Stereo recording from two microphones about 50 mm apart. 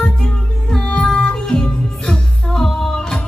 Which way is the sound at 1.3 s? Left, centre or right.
Centre.